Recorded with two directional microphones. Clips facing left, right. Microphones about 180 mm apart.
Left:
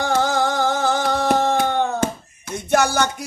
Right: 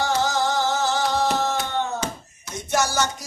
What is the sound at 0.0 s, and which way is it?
Music, 55° left (ahead or behind).